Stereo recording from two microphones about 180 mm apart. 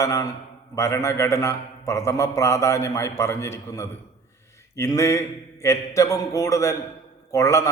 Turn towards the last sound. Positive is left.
turn(degrees=15)  # may be behind; listen again after turning